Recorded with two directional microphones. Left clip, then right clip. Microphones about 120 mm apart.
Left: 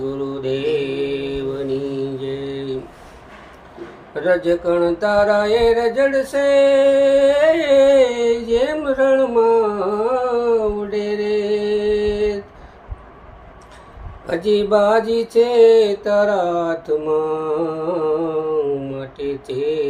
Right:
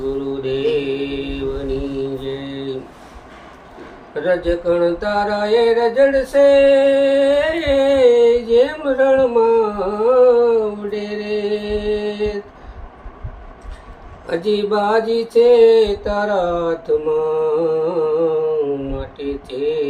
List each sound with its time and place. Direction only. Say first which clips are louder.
0.0 s mantra: right 2 dB; 45° left (ahead or behind)
4.1 s music: left 1 dB; 50° left (ahead or behind)
14.3 s speech: left 1 dB; 50° left (ahead or behind)
14.7 s mantra: left 2 dB; 50° left (ahead or behind)
18.9 s mantra: even; 50° left (ahead or behind)